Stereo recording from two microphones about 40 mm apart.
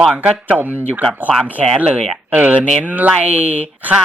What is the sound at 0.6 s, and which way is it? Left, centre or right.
Speech, right.